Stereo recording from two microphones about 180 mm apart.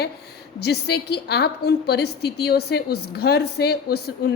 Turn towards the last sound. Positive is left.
turn(degrees=60)  # may be behind; listen again after turning